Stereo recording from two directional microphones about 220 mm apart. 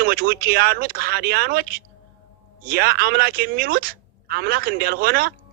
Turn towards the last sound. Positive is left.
turn(degrees=-45)  # may be behind; listen again after turning